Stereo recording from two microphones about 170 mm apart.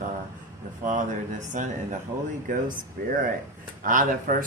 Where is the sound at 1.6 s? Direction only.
50° right (ahead or behind).